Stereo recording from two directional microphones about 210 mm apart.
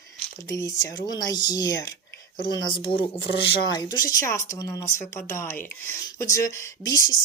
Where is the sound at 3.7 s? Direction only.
20° left (ahead or behind).